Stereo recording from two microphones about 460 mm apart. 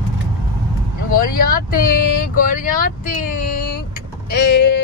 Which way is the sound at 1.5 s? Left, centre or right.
Centre.